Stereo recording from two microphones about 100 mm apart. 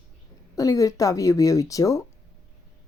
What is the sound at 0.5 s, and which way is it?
Speech, 35° left (ahead or behind).